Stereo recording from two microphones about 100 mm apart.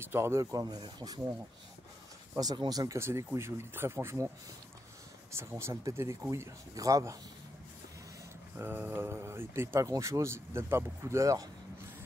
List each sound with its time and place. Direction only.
0.0 s speech: 25° right (ahead or behind); by 1.2 s 45° right (ahead or behind)
2.3 s speech: 45° right (ahead or behind)
3.0 s speech: 25° right (ahead or behind)
5.4 s speech: 25° right (ahead or behind)
8.5 s speech: 20° right (ahead or behind)